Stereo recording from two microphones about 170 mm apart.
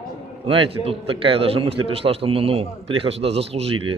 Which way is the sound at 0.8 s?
35° right (ahead or behind).